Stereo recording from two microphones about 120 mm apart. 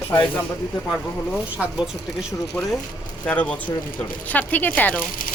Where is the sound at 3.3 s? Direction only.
10° left (ahead or behind).